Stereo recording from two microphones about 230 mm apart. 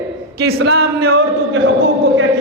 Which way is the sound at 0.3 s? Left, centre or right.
Right.